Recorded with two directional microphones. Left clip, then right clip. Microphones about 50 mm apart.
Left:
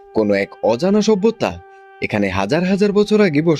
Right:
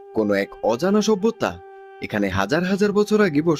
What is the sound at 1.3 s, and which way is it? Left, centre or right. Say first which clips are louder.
Speech: left 3 dB; left.